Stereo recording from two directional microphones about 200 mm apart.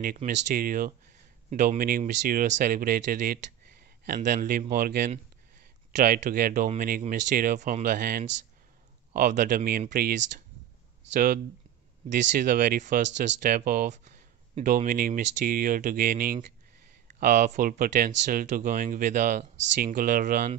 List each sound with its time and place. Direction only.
0.0 s speech: 45° right (ahead or behind)
11.1 s speech: 45° right (ahead or behind)